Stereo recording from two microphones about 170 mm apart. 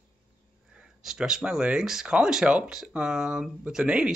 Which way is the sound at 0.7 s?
5° right (ahead or behind).